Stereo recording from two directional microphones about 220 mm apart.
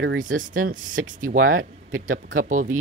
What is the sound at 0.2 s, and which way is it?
Speech, 35° right (ahead or behind).